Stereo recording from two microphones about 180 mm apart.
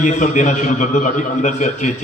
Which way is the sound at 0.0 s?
45° left (ahead or behind).